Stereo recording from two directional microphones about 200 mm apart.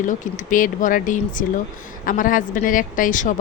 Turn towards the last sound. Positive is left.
turn(degrees=40)  # may be behind; listen again after turning